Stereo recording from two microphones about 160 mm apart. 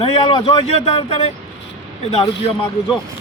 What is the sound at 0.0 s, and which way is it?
Speech, 30° left (ahead or behind).